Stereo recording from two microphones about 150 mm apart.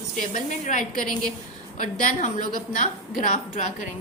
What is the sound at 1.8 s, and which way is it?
A woman's voice, 65° left (ahead or behind).